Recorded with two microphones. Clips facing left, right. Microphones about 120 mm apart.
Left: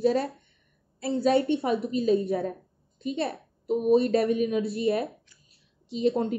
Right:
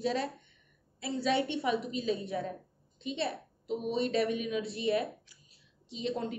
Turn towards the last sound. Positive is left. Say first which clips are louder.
# left 9 dB
turn(degrees=40)  # may be behind; listen again after turning